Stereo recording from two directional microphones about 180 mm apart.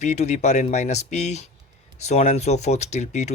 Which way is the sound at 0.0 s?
40° left (ahead or behind).